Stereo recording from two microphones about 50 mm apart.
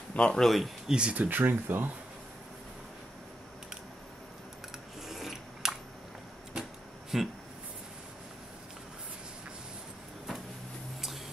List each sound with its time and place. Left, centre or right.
0.1 s speech: left
0.4 s speech: centre
0.8 s speech: centre
1.1 s speech: right
5.0 s a sound: centre
7.1 s a sound: centre